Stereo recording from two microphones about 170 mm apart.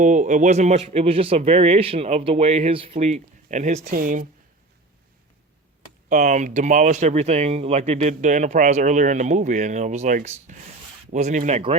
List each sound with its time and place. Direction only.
0.0 s speech: 45° right (ahead or behind)
6.1 s speech: 50° right (ahead or behind)